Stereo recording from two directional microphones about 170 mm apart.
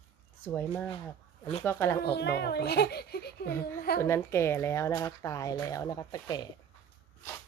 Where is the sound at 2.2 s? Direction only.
75° left (ahead or behind).